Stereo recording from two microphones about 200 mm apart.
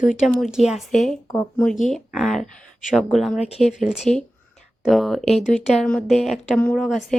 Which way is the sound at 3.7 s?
Centre (ahead or behind).